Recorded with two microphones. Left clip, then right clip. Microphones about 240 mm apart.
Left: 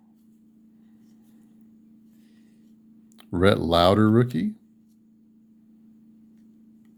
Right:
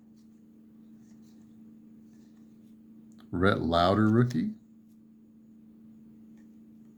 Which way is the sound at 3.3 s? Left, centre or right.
Left.